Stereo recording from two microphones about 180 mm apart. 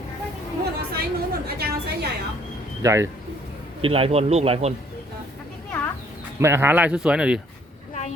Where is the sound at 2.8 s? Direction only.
15° right (ahead or behind).